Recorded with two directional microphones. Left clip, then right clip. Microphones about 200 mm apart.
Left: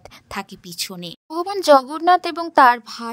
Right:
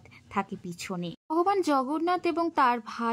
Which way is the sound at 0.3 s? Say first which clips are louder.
Left 1 dB; 45° left (ahead or behind).